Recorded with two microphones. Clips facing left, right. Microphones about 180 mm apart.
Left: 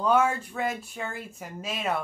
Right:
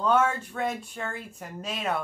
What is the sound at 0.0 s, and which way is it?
Speech, 10° left (ahead or behind).